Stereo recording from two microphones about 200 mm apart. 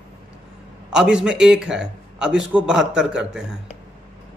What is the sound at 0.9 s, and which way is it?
A man's voice, 5° right (ahead or behind).